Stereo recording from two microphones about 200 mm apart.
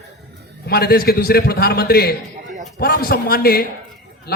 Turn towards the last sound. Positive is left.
turn(degrees=50)  # may be behind; listen again after turning